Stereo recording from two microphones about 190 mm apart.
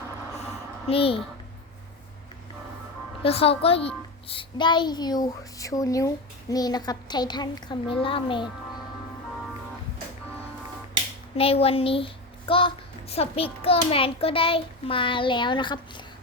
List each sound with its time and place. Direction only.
0.9 s a woman's voice: 30° left (ahead or behind)
3.2 s a woman's voice: 30° left (ahead or behind)
11.3 s a woman's voice: 30° left (ahead or behind)